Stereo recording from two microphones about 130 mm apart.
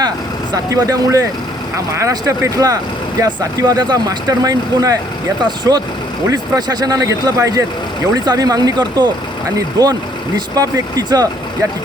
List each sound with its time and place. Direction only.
0.5 s speech: 25° right (ahead or behind)